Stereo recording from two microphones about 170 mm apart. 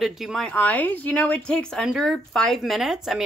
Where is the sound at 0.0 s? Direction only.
Centre (ahead or behind).